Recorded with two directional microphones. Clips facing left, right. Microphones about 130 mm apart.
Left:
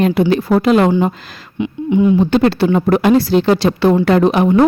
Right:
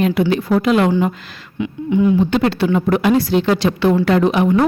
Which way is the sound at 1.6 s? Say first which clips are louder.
Left 2 dB; 20° left (ahead or behind).